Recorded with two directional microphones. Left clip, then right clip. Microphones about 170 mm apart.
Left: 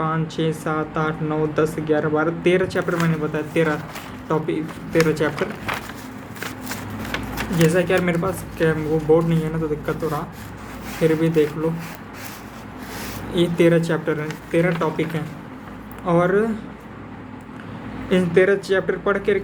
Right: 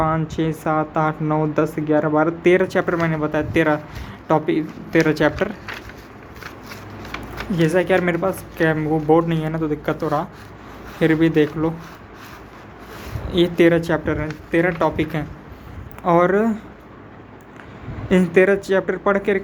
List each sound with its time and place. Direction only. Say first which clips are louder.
0.0 s speech: right 2 dB; 50° right (ahead or behind)
7.6 s speech: right 1 dB; 50° right (ahead or behind)
13.3 s speech: right 2 dB; 45° right (ahead or behind)
18.1 s speech: right 1 dB; 55° right (ahead or behind)